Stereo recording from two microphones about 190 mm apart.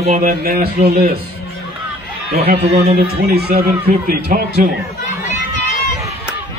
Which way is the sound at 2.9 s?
55° right (ahead or behind).